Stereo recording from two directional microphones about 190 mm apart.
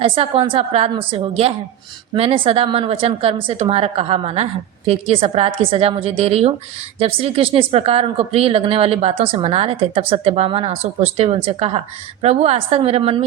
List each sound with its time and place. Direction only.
0.0 s a woman's voice: 30° right (ahead or behind)